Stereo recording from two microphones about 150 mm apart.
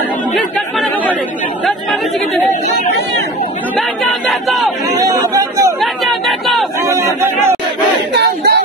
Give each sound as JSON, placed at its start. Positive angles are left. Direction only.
{"t": 3.7, "sound": "speech", "side_deg": 0}
{"t": 4.9, "sound": "chatter", "side_deg": -25}
{"t": 5.8, "sound": "chatter", "side_deg": 0}
{"t": 6.9, "sound": "speech", "side_deg": -20}
{"t": 8.1, "sound": "battle cry", "side_deg": -90}